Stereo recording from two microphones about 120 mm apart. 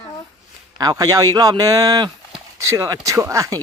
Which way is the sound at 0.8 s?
35° right (ahead or behind).